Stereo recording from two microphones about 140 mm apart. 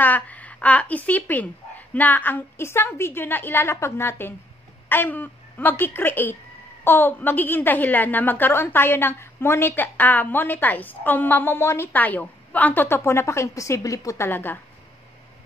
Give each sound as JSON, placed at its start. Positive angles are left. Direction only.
{"t": 0.0, "sound": "a woman's voice", "side_deg": 10}